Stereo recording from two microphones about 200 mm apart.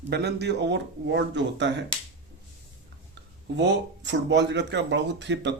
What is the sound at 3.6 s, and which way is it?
Speech, 60° right (ahead or behind).